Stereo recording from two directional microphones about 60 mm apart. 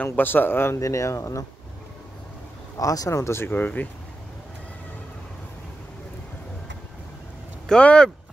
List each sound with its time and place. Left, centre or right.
0.0 s speech: left
0.7 s speech: left
2.8 s speech: left
3.5 s speech: left
7.6 s speech: centre